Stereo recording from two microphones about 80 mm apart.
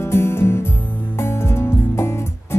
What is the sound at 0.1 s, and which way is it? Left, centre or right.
Music, left.